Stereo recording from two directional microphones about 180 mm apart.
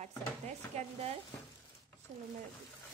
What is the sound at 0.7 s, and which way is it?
Speech, 35° right (ahead or behind).